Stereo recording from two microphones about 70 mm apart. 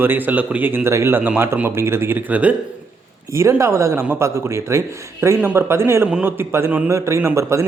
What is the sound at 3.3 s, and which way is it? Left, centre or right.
Speech, right.